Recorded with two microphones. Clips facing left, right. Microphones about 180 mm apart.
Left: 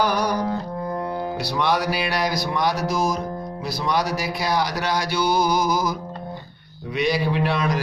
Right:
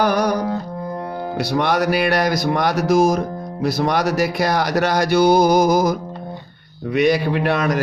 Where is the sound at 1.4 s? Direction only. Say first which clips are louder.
Right 5 dB; 50° right (ahead or behind).